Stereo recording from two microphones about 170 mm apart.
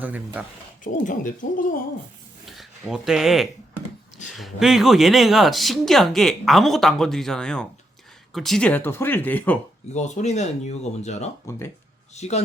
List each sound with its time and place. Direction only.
1.0 s speech: 50° left (ahead or behind)
2.5 s speech: centre (ahead or behind)
9.9 s speech: 45° left (ahead or behind)